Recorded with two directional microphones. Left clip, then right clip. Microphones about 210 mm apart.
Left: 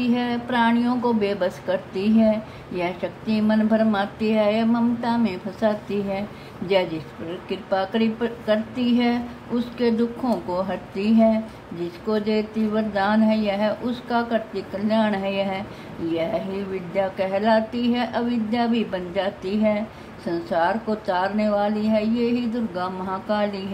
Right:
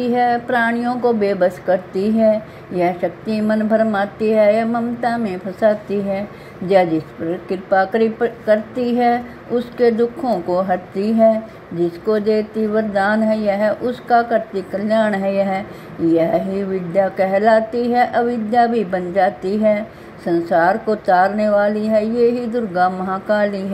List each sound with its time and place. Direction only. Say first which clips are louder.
0.0 s a woman's voice: right 9 dB; 15° right (ahead or behind)